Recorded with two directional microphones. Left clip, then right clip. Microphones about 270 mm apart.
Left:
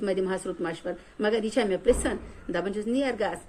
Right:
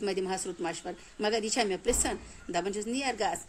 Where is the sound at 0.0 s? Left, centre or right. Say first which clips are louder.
Left 4 dB; right.